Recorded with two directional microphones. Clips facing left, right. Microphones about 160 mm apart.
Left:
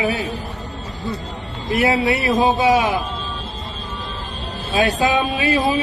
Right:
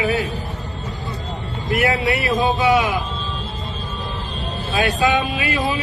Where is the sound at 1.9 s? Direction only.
35° left (ahead or behind).